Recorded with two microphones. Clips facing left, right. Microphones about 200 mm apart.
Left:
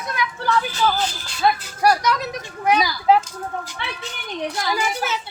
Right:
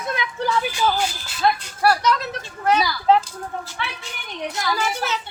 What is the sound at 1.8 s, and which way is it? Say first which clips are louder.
Speech: even; 10° left (ahead or behind).